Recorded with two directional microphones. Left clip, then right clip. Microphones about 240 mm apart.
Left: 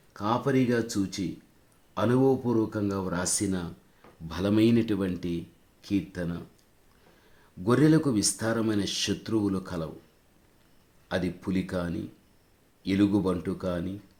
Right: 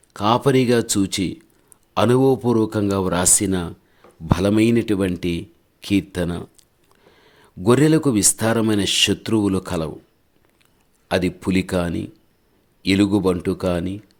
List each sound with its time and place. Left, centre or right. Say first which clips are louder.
0.1 s speech: right 10 dB; right
7.6 s speech: right 7 dB; right
11.1 s speech: right 10 dB; right